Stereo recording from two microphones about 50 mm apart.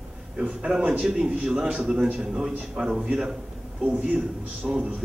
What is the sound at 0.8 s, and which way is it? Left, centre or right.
A man's voice, right.